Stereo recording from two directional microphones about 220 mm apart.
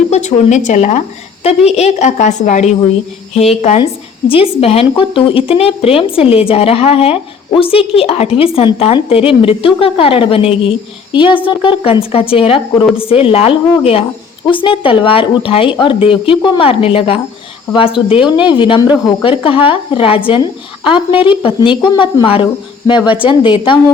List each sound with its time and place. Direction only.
0.1 s a woman's voice: 30° left (ahead or behind)